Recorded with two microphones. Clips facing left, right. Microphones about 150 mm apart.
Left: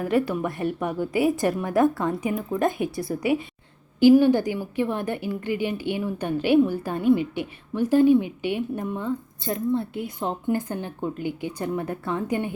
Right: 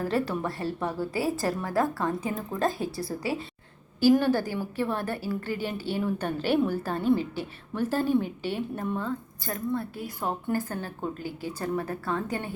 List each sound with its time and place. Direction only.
0.0 s a woman's voice: 15° left (ahead or behind)